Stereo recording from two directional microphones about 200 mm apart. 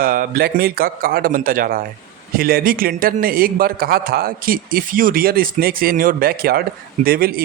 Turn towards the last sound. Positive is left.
turn(degrees=-50)  # may be behind; listen again after turning